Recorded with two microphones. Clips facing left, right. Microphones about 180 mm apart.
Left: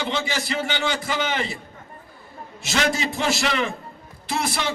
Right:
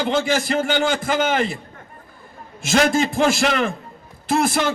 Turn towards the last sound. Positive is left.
turn(degrees=-50)  # may be behind; listen again after turning